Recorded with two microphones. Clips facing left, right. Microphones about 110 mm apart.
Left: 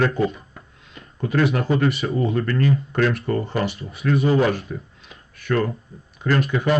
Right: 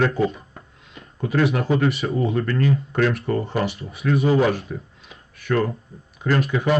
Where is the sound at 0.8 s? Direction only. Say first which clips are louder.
Even; centre (ahead or behind).